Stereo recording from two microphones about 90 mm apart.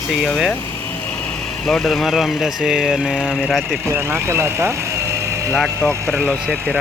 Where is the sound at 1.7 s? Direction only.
Centre (ahead or behind).